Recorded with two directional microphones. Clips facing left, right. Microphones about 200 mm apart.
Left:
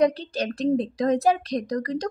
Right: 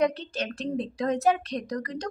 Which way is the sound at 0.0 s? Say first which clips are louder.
Left 4 dB; 35° left (ahead or behind).